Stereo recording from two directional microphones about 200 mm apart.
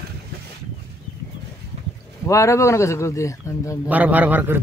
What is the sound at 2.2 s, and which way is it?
Speech, 15° left (ahead or behind).